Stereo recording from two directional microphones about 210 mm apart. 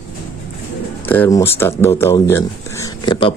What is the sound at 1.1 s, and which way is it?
Speech, 10° left (ahead or behind).